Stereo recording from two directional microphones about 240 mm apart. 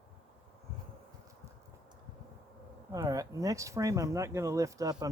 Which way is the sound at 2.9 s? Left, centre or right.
Centre.